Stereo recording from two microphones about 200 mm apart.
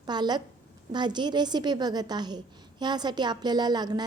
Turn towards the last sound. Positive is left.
turn(degrees=-20)  # may be behind; listen again after turning